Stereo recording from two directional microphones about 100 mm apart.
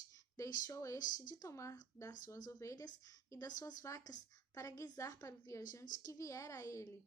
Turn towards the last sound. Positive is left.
turn(degrees=30)  # may be behind; listen again after turning